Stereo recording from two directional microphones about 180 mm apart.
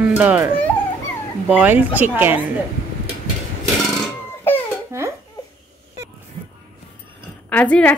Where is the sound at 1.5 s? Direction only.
10° right (ahead or behind).